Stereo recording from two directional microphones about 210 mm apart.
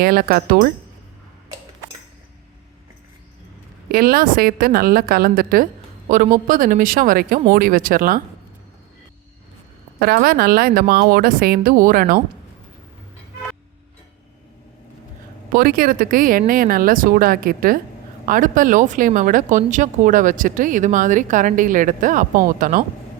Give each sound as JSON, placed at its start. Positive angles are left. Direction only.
{"t": 0.0, "sound": "a woman's voice", "side_deg": -45}
{"t": 3.8, "sound": "a woman's voice", "side_deg": -45}
{"t": 10.0, "sound": "a woman's voice", "side_deg": -45}
{"t": 15.5, "sound": "a woman's voice", "side_deg": -45}